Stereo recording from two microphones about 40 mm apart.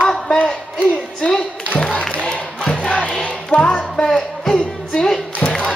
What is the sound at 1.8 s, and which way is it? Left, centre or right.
Crowd, left.